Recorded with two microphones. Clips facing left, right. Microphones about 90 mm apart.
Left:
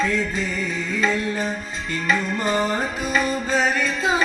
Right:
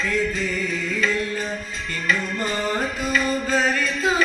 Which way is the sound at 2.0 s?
25° left (ahead or behind).